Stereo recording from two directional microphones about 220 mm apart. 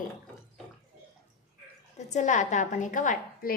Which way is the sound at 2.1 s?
35° left (ahead or behind).